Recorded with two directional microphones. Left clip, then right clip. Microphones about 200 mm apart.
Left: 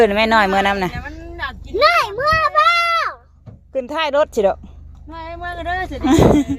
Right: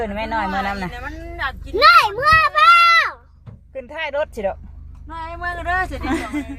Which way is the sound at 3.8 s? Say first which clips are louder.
Left 7 dB; 35° left (ahead or behind).